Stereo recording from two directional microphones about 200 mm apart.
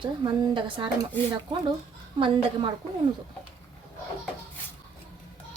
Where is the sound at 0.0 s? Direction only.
25° right (ahead or behind).